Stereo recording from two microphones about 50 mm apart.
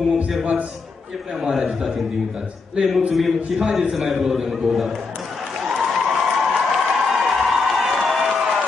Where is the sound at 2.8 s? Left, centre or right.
Centre.